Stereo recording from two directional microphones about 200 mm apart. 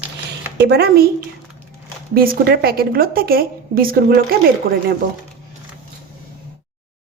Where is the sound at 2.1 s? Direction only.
50° right (ahead or behind).